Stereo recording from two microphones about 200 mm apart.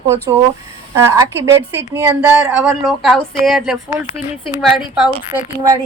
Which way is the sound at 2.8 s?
Centre (ahead or behind).